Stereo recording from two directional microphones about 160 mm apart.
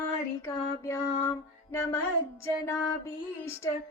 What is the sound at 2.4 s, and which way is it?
Child singing, 15° left (ahead or behind).